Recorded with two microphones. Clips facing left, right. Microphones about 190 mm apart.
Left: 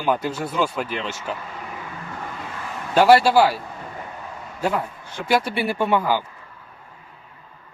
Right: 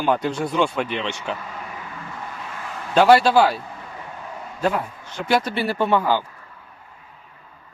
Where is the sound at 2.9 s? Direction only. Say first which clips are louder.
Even; 5° left (ahead or behind).